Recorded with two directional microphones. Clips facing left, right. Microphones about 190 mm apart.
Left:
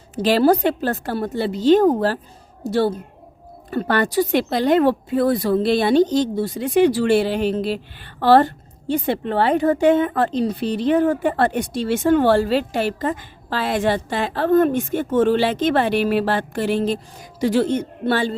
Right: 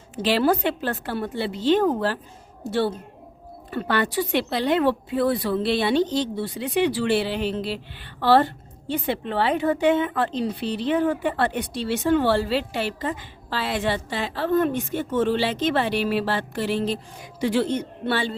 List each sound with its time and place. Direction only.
0.2 s a woman's voice: 45° left (ahead or behind)